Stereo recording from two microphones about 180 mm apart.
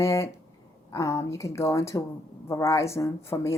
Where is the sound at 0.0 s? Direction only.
15° left (ahead or behind).